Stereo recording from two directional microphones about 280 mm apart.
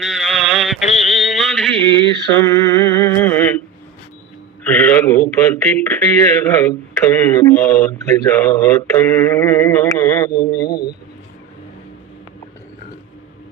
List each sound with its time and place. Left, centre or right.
0.0 s sheep: centre
0.9 s a sound: left
1.1 s mantra: centre
4.7 s a man's voice: centre
10.3 s speech: left